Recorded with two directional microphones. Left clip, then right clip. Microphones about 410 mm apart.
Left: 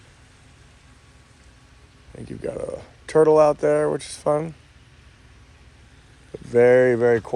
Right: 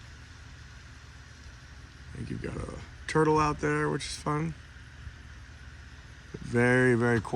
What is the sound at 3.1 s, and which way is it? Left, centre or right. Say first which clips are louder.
Speech: left 10 dB; centre.